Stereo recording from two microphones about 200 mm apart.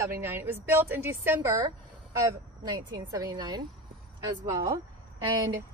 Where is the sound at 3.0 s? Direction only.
20° right (ahead or behind).